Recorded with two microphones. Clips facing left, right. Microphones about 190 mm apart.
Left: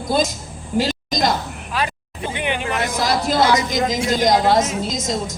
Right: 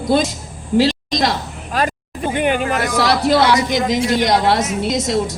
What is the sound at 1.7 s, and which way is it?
Vehicle, 45° right (ahead or behind).